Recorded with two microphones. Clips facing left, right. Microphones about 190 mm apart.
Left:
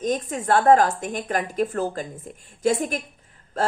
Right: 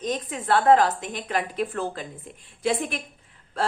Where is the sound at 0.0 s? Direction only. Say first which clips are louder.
Left 4 dB; 45° left (ahead or behind).